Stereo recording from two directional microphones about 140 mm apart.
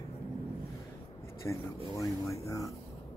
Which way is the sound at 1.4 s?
20° left (ahead or behind).